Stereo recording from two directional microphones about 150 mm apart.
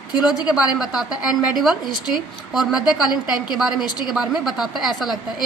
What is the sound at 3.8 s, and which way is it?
Speech, 30° left (ahead or behind).